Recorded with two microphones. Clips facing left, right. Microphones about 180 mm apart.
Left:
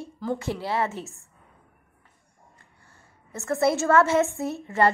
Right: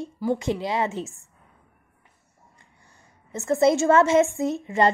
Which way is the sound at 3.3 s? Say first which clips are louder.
Right 4 dB; 20° right (ahead or behind).